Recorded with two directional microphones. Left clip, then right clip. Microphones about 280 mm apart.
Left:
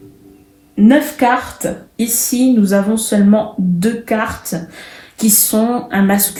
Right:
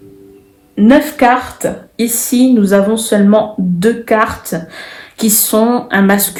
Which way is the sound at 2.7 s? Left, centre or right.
Right.